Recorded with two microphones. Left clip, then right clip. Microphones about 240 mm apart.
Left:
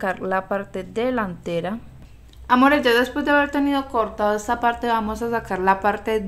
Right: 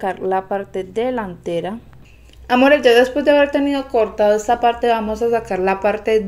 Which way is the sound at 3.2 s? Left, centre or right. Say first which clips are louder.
Right 5 dB; left.